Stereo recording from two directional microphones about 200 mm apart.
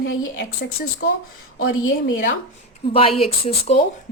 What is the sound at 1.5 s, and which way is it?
Speech, 85° left.